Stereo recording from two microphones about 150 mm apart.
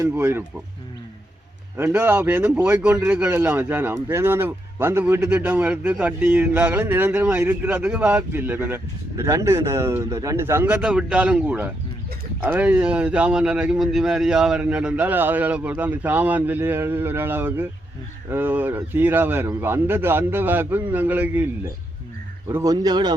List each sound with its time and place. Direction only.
0.0 s speech: 15° right (ahead or behind)
1.7 s speech: 15° right (ahead or behind)